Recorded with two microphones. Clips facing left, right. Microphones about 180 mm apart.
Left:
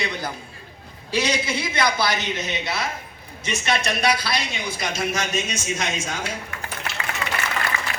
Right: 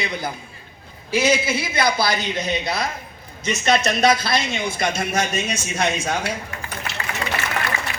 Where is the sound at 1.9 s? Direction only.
10° right (ahead or behind).